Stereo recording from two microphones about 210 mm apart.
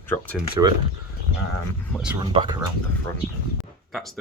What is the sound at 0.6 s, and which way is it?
Speech, 15° right (ahead or behind).